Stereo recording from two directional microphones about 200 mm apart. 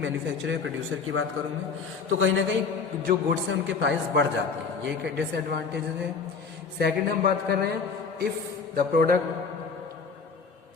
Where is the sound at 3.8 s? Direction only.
65° right (ahead or behind).